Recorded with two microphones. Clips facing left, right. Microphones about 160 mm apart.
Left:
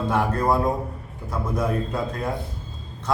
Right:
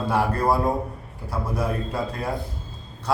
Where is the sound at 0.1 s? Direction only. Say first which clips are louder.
Even; 5° right (ahead or behind).